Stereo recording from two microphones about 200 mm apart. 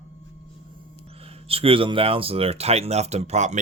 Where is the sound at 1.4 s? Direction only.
30° right (ahead or behind).